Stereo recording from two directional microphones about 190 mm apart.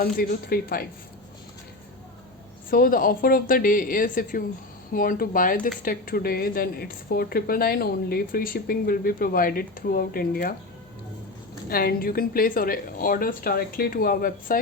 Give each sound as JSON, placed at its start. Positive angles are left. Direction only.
{"t": 0.0, "sound": "a woman's voice", "side_deg": 50}
{"t": 2.6, "sound": "a woman's voice", "side_deg": 50}
{"t": 11.7, "sound": "a woman's voice", "side_deg": 50}